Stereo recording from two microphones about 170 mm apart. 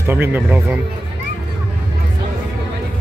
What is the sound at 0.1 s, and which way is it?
Speech, 10° right (ahead or behind).